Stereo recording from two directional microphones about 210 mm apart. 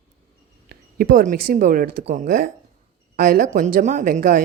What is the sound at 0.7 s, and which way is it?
A woman's voice, 45° right (ahead or behind).